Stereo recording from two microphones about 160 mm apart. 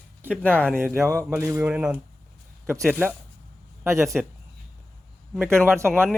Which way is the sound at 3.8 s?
20° right (ahead or behind).